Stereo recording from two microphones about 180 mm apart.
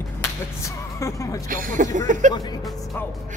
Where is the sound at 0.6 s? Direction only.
15° left (ahead or behind).